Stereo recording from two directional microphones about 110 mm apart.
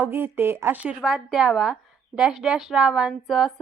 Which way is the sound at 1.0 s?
5° right (ahead or behind).